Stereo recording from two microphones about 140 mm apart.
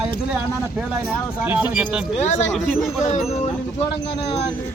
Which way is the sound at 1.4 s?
10° right (ahead or behind).